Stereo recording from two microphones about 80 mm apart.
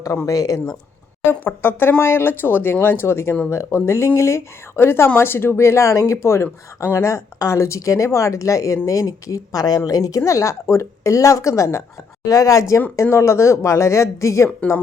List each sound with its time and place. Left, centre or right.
0.0 s speech: left
1.3 s speech: left